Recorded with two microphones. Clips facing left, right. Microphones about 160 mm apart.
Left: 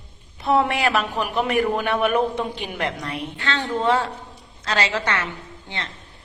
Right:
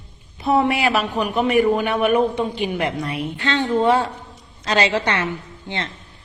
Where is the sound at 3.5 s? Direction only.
15° right (ahead or behind).